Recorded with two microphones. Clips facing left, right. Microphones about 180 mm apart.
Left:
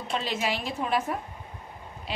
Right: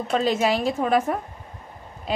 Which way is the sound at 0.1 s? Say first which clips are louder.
Right 8 dB; 45° right (ahead or behind).